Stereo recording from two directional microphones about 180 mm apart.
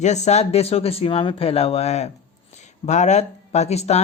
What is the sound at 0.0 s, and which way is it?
Speech, 40° left (ahead or behind).